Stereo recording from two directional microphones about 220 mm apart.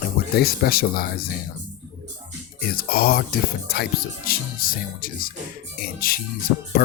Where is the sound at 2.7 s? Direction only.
45° left (ahead or behind).